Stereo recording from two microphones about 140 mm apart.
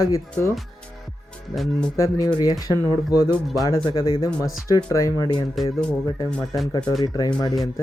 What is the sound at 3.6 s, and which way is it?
Speech, 30° left (ahead or behind).